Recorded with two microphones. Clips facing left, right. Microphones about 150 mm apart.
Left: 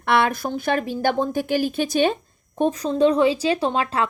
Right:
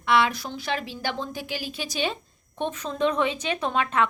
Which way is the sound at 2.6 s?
35° left (ahead or behind).